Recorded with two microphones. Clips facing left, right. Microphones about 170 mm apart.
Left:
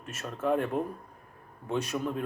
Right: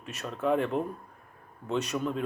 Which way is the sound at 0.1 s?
5° left (ahead or behind).